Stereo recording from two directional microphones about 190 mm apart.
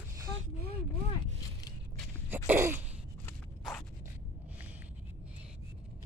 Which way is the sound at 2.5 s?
10° right (ahead or behind).